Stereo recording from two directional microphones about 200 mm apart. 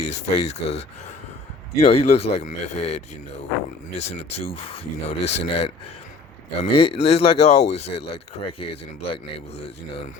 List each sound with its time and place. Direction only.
0.0 s speech: 35° left (ahead or behind)
4.5 s speech: 30° left (ahead or behind)